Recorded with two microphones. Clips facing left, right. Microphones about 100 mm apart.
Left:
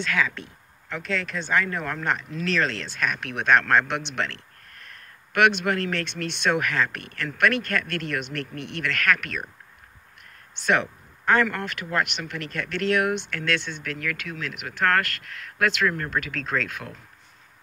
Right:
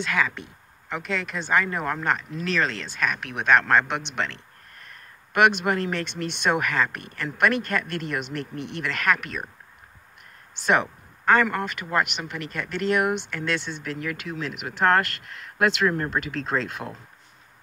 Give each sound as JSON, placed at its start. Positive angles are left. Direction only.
{"t": 0.0, "sound": "speech", "side_deg": -10}
{"t": 8.5, "sound": "speech", "side_deg": 60}
{"t": 8.8, "sound": "speech", "side_deg": -15}
{"t": 10.6, "sound": "speech", "side_deg": -10}